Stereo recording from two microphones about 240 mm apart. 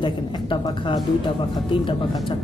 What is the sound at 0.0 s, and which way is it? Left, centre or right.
A woman's voice, centre.